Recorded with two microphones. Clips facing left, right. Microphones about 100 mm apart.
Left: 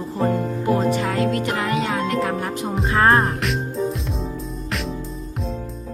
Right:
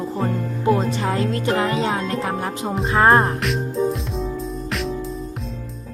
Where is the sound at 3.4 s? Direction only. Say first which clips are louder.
Right 2 dB; centre (ahead or behind).